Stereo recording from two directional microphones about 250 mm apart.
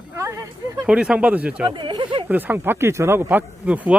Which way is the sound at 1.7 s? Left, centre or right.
Centre.